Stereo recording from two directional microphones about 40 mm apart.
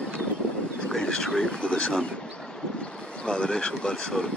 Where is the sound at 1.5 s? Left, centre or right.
Left.